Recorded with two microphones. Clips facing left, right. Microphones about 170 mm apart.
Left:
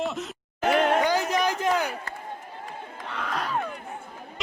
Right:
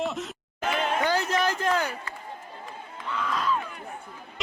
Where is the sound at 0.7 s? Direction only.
60° left (ahead or behind).